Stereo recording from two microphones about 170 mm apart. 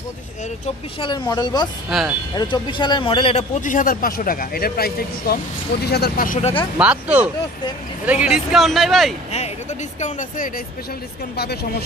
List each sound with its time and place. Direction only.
1.0 s speech: 25° left (ahead or behind)
1.9 s speech: centre (ahead or behind)
2.3 s speech: 25° left (ahead or behind)
3.6 s speech: 55° left (ahead or behind)
6.4 s speech: 30° left (ahead or behind)
6.8 s speech: 10° right (ahead or behind)
9.9 s speech: 45° left (ahead or behind)